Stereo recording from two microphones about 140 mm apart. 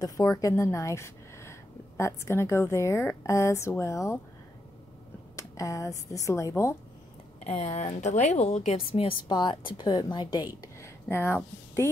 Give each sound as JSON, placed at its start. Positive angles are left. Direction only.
{"t": 0.0, "sound": "a woman's voice", "side_deg": 25}
{"t": 5.3, "sound": "speech", "side_deg": 25}
{"t": 7.4, "sound": "a woman's voice", "side_deg": 50}
{"t": 10.6, "sound": "speech", "side_deg": 20}